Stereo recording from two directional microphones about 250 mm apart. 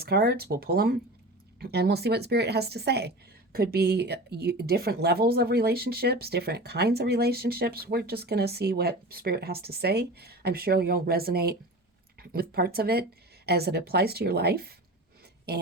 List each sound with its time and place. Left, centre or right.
0.0 s speech: right